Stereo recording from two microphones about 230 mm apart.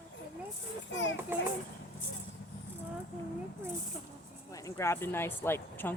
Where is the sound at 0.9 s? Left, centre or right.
Left.